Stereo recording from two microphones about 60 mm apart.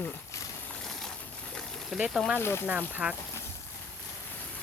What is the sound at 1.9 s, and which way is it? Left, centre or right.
Speech, centre.